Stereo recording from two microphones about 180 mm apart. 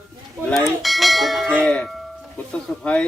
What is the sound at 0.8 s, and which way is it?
Speech, centre (ahead or behind).